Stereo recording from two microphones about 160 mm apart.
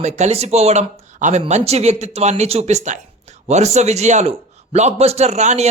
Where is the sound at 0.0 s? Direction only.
45° right (ahead or behind).